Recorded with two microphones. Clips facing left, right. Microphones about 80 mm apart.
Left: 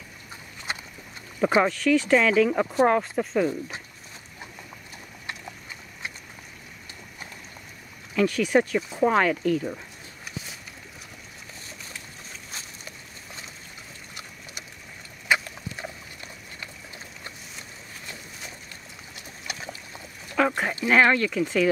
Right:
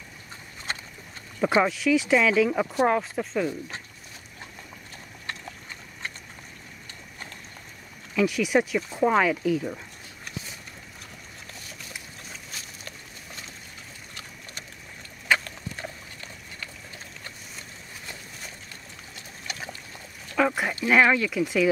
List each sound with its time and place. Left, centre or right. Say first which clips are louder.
0.7 s boat: left 1 dB; centre
1.4 s speech: left 1 dB; centre
1.7 s speech: left 1 dB; centre
8.2 s speech: left 1 dB; centre
8.7 s speech: even; centre
15.2 s a sound: even; centre
20.3 s a sound: even; centre
20.8 s speech: even; centre